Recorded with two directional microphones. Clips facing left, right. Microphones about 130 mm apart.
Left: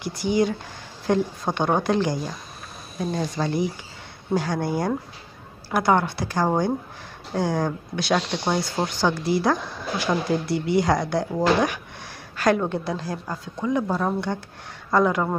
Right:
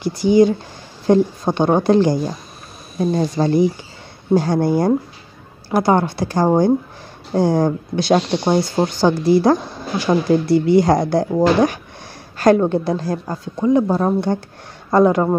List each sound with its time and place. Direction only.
0.0 s a woman's voice: 25° right (ahead or behind)